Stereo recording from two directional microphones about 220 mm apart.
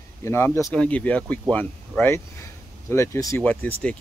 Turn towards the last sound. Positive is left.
turn(degrees=5)  # may be behind; listen again after turning